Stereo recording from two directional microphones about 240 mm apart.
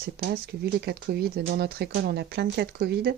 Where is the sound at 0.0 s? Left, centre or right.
Right.